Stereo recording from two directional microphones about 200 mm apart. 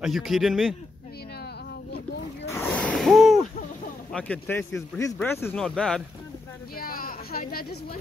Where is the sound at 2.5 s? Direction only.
10° left (ahead or behind).